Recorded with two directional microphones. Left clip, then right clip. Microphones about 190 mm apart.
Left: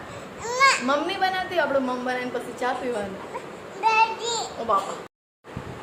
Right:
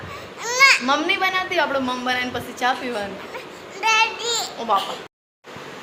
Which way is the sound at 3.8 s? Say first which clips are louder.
Right 2 dB; 5° left (ahead or behind).